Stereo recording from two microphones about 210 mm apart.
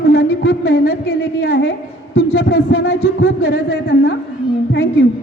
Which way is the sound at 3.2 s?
50° left (ahead or behind).